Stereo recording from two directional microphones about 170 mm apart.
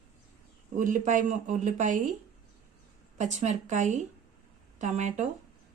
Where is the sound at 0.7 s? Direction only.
50° right (ahead or behind).